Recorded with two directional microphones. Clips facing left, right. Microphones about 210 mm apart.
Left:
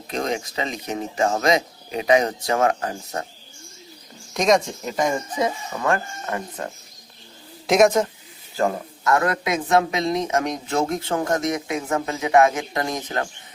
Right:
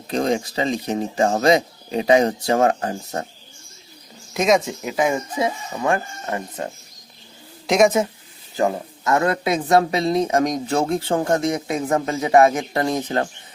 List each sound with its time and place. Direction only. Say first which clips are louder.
0.1 s a woman's voice: right 5 dB; 35° right (ahead or behind)
4.4 s speech: right 1 dB; 5° right (ahead or behind)
7.7 s speech: even; centre (ahead or behind)
8.5 s a woman's voice: right 2 dB; 20° right (ahead or behind)